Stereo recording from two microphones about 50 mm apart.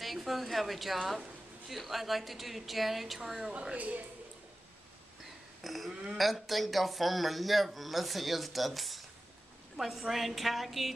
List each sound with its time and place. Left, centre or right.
0.0 s a woman's voice: centre
3.7 s a woman's voice: right
5.6 s livestock: centre
6.1 s a man's voice: centre